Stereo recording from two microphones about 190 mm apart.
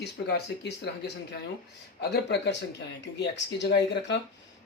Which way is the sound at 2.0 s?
60° left (ahead or behind).